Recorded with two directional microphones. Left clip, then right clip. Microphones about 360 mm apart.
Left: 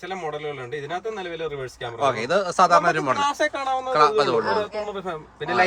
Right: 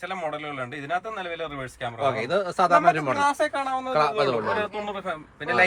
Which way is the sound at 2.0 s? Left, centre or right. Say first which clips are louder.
Left 3 dB; centre.